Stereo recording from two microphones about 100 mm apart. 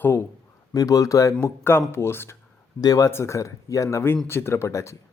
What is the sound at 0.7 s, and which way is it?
Speech, 35° left (ahead or behind).